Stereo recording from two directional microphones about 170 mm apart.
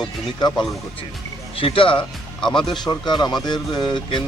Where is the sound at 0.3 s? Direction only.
25° left (ahead or behind).